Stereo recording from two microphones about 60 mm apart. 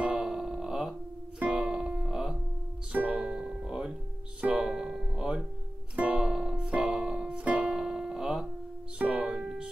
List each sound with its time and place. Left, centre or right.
0.0 s music: centre
3.0 s music: right
3.3 s music: centre
6.2 s music: centre